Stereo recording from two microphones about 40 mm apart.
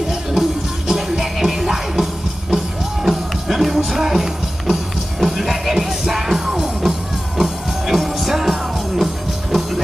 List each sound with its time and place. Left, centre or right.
0.1 s music: centre